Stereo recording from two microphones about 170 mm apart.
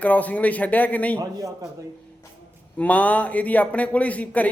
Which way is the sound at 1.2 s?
20° right (ahead or behind).